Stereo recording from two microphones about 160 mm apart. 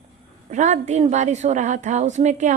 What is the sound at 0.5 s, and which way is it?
A woman's voice, 50° right (ahead or behind).